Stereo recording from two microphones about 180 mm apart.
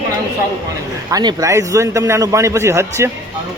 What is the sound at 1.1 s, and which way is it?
A man's voice, 20° right (ahead or behind).